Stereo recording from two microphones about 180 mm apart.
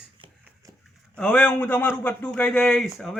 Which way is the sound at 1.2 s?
10° left (ahead or behind).